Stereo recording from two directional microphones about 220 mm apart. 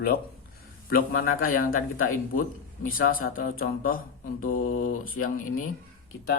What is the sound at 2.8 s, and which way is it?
Speech, 40° left (ahead or behind).